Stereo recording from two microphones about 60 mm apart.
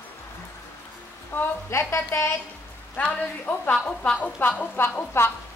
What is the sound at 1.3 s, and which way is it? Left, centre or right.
Speech, left.